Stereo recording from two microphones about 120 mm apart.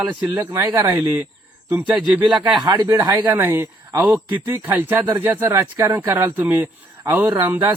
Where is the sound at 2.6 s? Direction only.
40° right (ahead or behind).